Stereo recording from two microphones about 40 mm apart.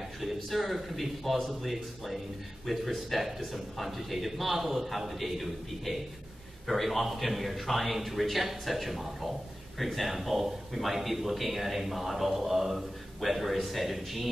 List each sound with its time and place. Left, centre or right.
0.2 s a man's voice: centre